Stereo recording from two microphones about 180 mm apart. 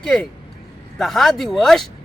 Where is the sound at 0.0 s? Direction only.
5° left (ahead or behind).